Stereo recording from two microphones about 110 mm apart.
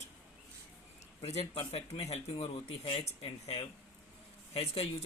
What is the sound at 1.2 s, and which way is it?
Speech, 70° left (ahead or behind).